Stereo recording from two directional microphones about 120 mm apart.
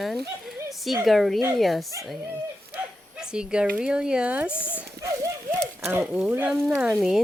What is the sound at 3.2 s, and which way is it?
Speech, 5° right (ahead or behind).